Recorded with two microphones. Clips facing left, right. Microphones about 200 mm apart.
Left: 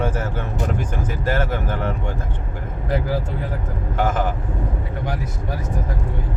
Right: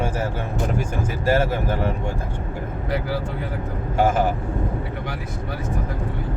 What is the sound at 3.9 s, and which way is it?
Speech, 10° right (ahead or behind).